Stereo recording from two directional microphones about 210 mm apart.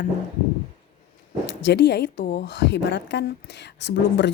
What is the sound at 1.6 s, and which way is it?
Speech, 55° left (ahead or behind).